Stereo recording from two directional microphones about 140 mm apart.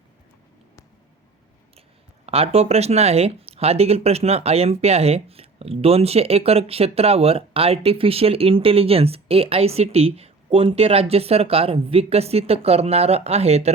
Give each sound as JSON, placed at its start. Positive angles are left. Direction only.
{"t": 2.2, "sound": "speech", "side_deg": -45}